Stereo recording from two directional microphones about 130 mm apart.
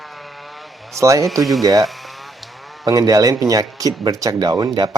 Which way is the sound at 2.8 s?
30° right (ahead or behind).